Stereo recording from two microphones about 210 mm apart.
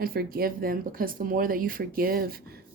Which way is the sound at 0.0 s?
45° right (ahead or behind).